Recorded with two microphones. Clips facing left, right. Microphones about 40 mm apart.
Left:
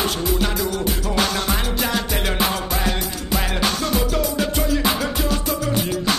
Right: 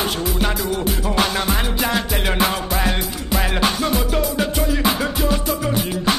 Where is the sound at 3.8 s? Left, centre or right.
Centre.